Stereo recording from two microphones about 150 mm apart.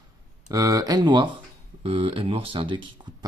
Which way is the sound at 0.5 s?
25° right (ahead or behind).